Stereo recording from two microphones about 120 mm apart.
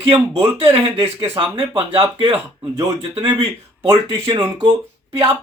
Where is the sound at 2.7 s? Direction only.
30° right (ahead or behind).